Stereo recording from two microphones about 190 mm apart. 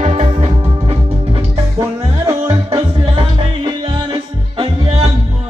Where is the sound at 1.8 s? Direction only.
15° right (ahead or behind).